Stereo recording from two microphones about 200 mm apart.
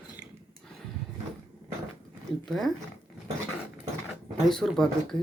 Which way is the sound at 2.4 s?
Centre (ahead or behind).